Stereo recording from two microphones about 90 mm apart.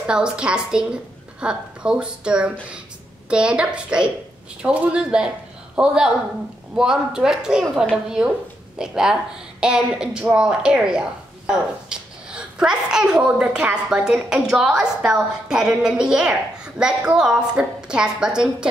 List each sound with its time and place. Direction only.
0.0 s speech: 10° right (ahead or behind)